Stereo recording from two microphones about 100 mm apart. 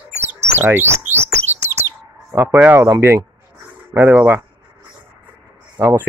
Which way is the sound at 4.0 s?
20° right (ahead or behind).